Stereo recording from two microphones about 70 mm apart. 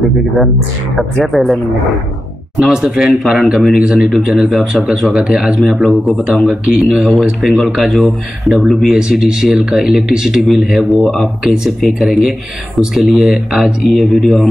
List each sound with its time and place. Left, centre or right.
1.2 s speech: centre
2.6 s speech: centre